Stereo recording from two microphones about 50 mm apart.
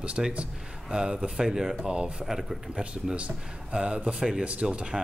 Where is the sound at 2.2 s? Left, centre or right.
Centre.